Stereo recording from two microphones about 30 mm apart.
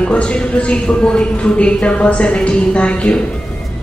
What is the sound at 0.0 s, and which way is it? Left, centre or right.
Speech, left.